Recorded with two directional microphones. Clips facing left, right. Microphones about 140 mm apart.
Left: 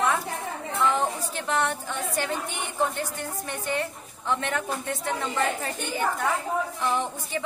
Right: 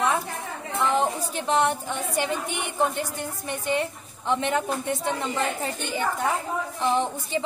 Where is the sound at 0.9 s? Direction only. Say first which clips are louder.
Right 3 dB; 20° right (ahead or behind).